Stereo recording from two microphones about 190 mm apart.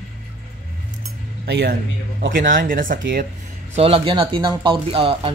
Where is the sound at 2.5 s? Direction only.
45° right (ahead or behind).